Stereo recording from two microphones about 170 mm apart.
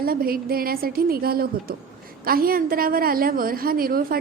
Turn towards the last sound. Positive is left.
turn(degrees=-60)  # may be behind; listen again after turning